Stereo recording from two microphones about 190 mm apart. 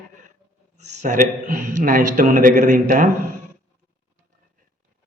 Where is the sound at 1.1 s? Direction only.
45° right (ahead or behind).